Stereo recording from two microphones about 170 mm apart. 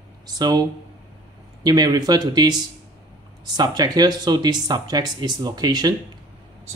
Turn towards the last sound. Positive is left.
turn(degrees=-25)  # may be behind; listen again after turning